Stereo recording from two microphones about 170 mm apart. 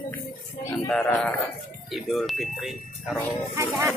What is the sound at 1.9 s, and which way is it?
Speech, centre (ahead or behind).